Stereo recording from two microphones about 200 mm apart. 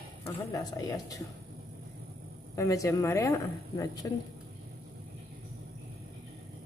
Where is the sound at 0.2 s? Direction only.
15° left (ahead or behind).